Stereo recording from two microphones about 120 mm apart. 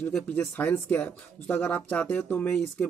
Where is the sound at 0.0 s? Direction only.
10° left (ahead or behind).